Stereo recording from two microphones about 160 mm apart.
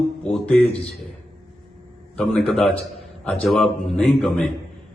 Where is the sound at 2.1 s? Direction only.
5° left (ahead or behind).